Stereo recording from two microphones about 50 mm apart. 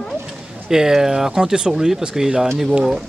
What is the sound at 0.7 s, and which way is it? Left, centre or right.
A man's voice, centre.